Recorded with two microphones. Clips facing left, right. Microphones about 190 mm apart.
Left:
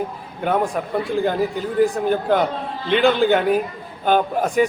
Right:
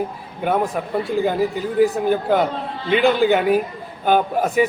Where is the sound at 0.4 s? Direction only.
5° right (ahead or behind).